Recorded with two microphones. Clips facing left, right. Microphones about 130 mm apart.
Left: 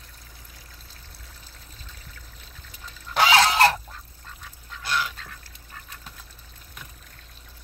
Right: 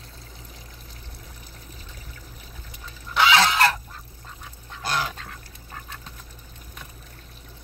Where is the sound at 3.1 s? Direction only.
40° left (ahead or behind).